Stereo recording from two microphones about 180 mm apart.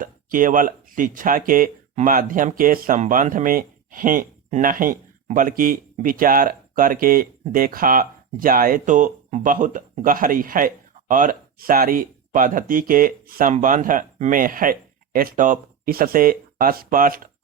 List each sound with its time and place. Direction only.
0.0 s speech: 50° right (ahead or behind)